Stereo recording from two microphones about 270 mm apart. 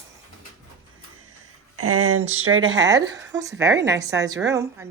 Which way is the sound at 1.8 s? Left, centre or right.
Right.